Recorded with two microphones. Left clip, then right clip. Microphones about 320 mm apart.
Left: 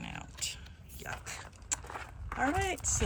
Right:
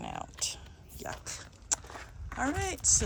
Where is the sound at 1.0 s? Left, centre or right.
Centre.